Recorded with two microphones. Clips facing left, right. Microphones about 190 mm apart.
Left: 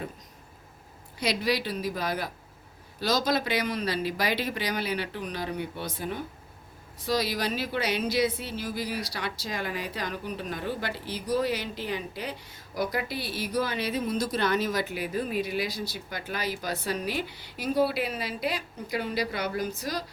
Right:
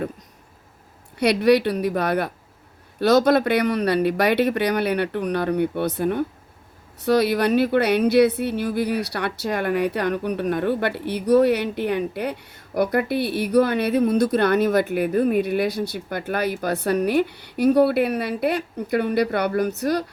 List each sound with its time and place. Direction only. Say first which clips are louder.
1.2 s speech: right 11 dB; 65° right (ahead or behind)